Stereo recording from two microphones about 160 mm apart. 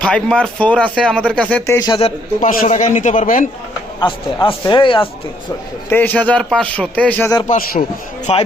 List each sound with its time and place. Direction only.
0.0 s speech: 5° left (ahead or behind)
1.9 s speech: 40° left (ahead or behind)
2.4 s a man's voice: 50° left (ahead or behind)
4.4 s speech: 30° left (ahead or behind)
5.9 s speech: 10° left (ahead or behind)
7.4 s a man's voice: 55° left (ahead or behind)
8.3 s speech: 40° left (ahead or behind)